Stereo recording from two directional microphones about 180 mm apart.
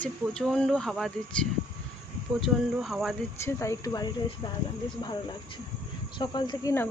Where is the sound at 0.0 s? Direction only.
5° left (ahead or behind).